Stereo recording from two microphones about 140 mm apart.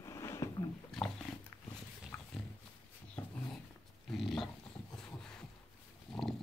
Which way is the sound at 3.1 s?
10° left (ahead or behind).